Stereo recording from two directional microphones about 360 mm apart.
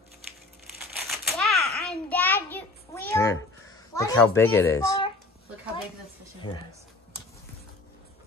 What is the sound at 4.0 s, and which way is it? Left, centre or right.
A child's voice, centre.